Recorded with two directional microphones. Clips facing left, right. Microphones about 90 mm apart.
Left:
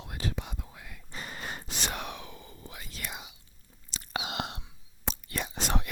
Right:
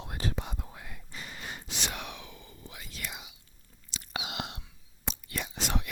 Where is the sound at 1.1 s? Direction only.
45° left (ahead or behind).